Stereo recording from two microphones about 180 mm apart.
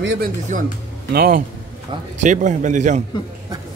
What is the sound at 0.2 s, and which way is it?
A man's voice, 50° right (ahead or behind).